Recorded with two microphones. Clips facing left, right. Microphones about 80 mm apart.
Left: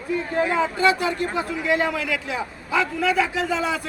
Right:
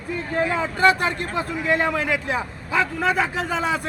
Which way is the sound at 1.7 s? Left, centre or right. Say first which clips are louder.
Right 2 dB; right.